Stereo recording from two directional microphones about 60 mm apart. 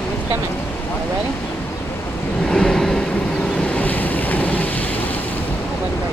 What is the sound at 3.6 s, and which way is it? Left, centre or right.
Waves, left.